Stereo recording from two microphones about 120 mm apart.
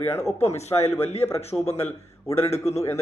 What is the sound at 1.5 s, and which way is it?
Speech, 10° left (ahead or behind).